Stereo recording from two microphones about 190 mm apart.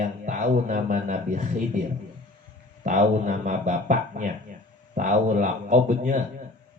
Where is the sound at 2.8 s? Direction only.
40° right (ahead or behind).